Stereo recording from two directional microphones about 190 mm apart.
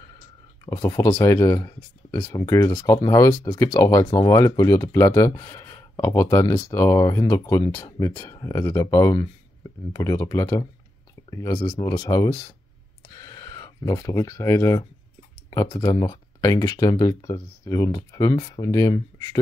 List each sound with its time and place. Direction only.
0.7 s speech: 15° left (ahead or behind)